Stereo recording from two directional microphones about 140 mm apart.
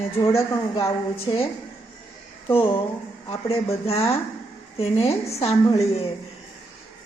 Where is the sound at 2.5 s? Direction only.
40° left (ahead or behind).